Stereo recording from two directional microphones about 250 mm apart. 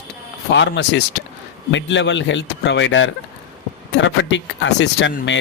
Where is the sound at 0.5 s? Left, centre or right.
Left.